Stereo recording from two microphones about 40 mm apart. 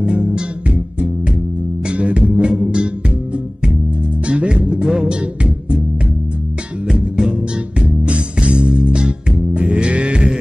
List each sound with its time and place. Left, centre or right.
0.0 s music: right
1.9 s music: right
4.3 s music: right
6.9 s music: centre
7.8 s music: right